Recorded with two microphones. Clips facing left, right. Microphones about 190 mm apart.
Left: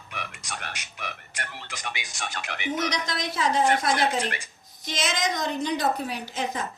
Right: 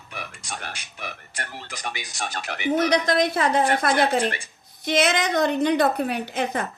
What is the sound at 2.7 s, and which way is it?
A woman's voice, 55° right (ahead or behind).